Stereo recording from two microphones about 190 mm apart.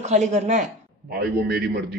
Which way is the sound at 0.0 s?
35° right (ahead or behind).